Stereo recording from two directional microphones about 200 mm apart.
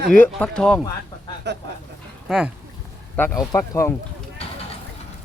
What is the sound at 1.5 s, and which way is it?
Speech, 60° right (ahead or behind).